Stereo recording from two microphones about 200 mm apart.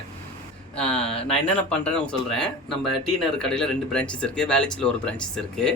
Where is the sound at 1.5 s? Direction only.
5° left (ahead or behind).